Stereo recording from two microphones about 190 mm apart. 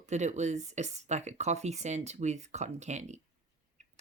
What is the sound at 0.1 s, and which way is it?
Speech, 35° right (ahead or behind).